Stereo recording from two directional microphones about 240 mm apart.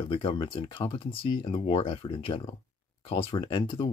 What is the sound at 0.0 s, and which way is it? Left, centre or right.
Speech, centre.